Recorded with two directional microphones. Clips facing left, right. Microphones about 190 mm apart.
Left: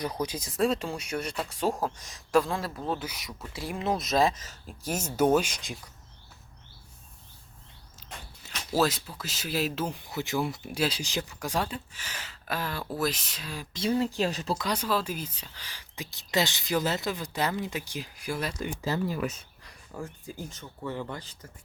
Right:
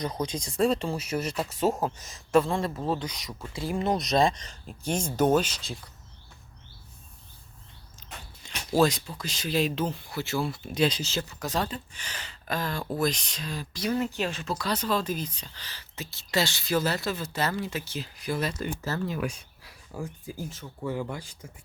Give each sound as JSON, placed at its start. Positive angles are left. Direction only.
{"t": 0.0, "sound": "speech", "side_deg": 10}
{"t": 8.4, "sound": "speech", "side_deg": 5}
{"t": 14.0, "sound": "speech", "side_deg": 35}
{"t": 14.6, "sound": "speech", "side_deg": 10}
{"t": 19.3, "sound": "speech", "side_deg": -5}